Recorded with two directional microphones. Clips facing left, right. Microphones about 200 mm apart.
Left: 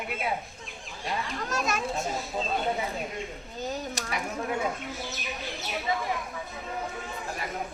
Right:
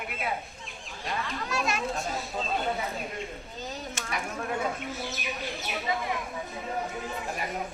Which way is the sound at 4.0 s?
35° left (ahead or behind).